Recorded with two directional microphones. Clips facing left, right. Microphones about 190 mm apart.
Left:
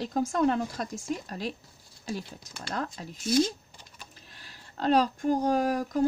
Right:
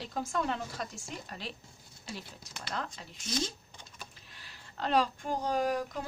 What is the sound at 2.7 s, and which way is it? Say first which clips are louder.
Speech: left 5 dB; 45° left (ahead or behind).